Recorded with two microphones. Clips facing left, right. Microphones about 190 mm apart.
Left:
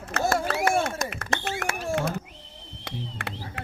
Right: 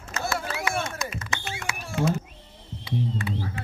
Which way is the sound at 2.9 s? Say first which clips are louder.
Right 7 dB; 75° left (ahead or behind).